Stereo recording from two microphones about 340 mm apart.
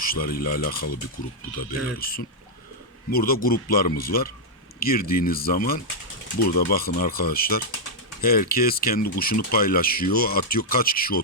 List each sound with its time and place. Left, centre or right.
0.0 s speech: left
2.0 s speech: left